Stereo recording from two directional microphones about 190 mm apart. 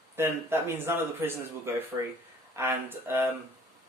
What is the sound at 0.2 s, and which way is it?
Speech, 10° right (ahead or behind).